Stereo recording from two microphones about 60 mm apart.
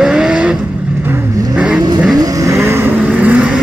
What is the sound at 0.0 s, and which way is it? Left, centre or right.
Vehicle, centre.